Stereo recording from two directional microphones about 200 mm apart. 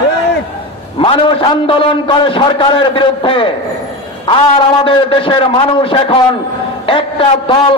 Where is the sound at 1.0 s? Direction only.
25° left (ahead or behind).